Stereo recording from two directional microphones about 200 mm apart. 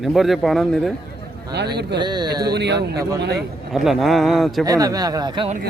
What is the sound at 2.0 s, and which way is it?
Speech, 20° right (ahead or behind).